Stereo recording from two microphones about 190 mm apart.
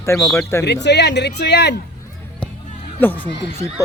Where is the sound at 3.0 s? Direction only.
10° left (ahead or behind).